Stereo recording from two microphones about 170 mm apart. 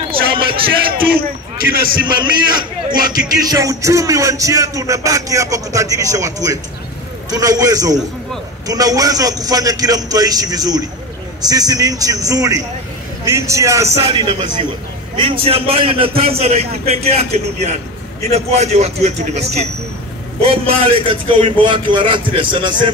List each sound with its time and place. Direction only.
0.1 s a sound: 30° right (ahead or behind)
1.0 s a man's voice: 60° right (ahead or behind)
2.0 s music: 25° right (ahead or behind)
13.2 s a man's voice: 15° right (ahead or behind)
14.0 s music: 25° right (ahead or behind)
15.1 s a man's voice: 30° right (ahead or behind)
20.4 s music: 35° right (ahead or behind)